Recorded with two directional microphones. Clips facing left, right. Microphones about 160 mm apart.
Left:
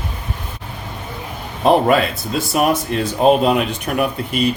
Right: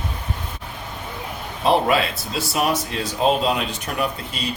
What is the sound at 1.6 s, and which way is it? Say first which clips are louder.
Speech: left 5 dB; 50° left (ahead or behind).